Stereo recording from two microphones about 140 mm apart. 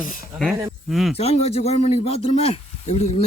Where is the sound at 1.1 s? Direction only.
45° left (ahead or behind).